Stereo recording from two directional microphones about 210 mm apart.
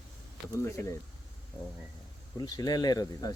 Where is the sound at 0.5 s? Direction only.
15° left (ahead or behind).